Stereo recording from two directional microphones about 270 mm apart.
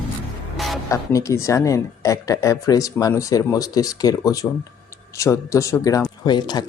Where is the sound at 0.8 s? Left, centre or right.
Centre.